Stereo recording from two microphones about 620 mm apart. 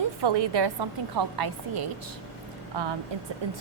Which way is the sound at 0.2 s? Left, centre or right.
Right.